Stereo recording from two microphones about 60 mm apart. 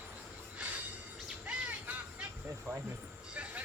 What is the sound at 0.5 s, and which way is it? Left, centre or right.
Train, right.